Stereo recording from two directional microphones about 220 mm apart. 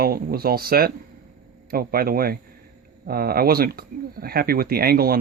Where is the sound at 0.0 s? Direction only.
45° right (ahead or behind).